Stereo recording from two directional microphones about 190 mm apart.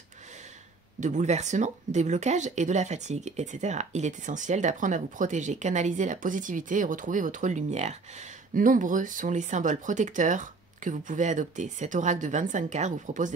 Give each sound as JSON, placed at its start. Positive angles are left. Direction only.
{"t": 1.0, "sound": "speech", "side_deg": -40}